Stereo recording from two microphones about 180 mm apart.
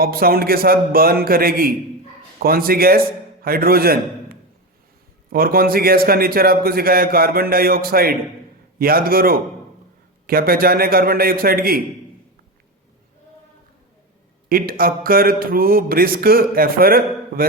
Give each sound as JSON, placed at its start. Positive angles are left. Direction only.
{"t": 0.0, "sound": "speech", "side_deg": -55}
{"t": 5.3, "sound": "speech", "side_deg": -55}
{"t": 14.5, "sound": "speech", "side_deg": -55}